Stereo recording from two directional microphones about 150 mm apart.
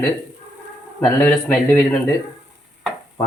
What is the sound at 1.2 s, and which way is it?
Speech, 10° left (ahead or behind).